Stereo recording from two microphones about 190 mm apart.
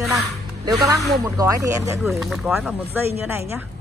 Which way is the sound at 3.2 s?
15° right (ahead or behind).